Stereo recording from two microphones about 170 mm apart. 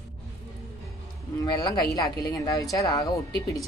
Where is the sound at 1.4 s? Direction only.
25° left (ahead or behind).